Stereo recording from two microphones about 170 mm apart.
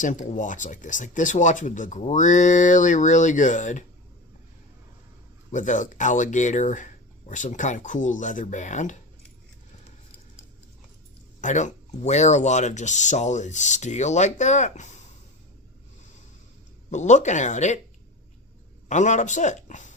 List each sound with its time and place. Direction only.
0.0 s speech: 50° left (ahead or behind)
5.5 s speech: 45° left (ahead or behind)
11.3 s speech: 45° left (ahead or behind)
16.9 s speech: 45° left (ahead or behind)
18.9 s speech: 45° left (ahead or behind)